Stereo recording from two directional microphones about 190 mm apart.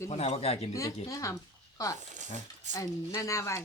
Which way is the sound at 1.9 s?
40° right (ahead or behind).